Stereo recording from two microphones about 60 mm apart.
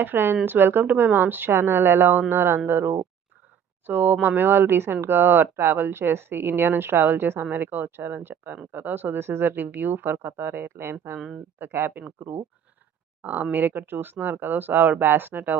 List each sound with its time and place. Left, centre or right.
0.0 s speech: right